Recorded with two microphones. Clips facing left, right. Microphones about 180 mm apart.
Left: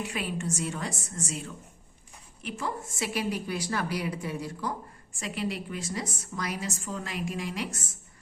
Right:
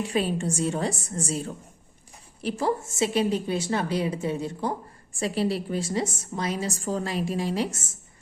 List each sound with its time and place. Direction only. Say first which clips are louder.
0.0 s a woman's voice: right 7 dB; 30° right (ahead or behind)